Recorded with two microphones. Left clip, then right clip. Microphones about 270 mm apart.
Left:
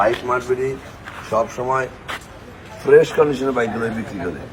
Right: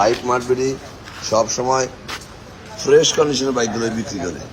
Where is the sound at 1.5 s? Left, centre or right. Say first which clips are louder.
Right 2 dB; centre.